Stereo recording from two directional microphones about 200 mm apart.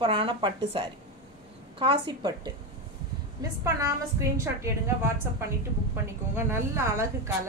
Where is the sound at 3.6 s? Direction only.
15° right (ahead or behind).